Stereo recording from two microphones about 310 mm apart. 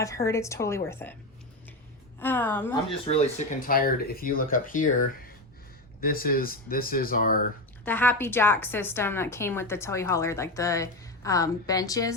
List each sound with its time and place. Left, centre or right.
0.0 s a woman's voice: centre
2.1 s a woman's voice: centre
3.1 s speech: left
7.9 s a woman's voice: centre